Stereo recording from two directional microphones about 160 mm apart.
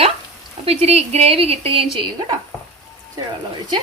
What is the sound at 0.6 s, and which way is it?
Speech, 40° right (ahead or behind).